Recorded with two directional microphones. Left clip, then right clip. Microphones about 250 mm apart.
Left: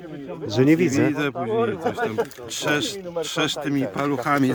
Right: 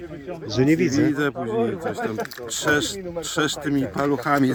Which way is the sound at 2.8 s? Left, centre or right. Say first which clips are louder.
Left 1 dB; left.